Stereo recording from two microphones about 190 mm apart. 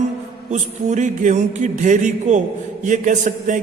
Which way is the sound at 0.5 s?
40° right (ahead or behind).